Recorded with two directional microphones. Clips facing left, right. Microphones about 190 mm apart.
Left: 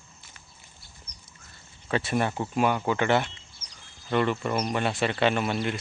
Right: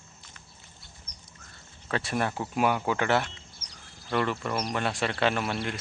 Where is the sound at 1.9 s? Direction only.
Centre (ahead or behind).